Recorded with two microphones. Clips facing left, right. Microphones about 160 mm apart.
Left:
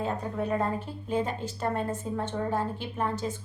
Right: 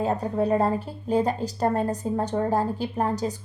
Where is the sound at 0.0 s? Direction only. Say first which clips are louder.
Right 6 dB; 35° right (ahead or behind).